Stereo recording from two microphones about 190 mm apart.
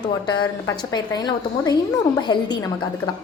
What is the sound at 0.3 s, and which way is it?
A woman's voice, 20° left (ahead or behind).